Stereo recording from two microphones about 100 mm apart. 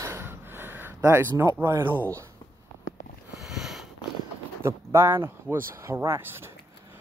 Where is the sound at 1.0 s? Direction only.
25° right (ahead or behind).